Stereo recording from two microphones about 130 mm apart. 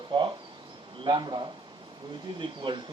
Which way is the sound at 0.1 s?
35° right (ahead or behind).